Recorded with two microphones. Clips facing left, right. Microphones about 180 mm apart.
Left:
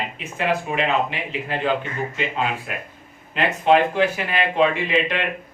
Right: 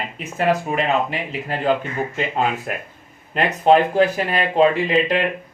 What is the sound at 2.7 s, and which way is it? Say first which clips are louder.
Speech: right 4 dB; 45° right (ahead or behind).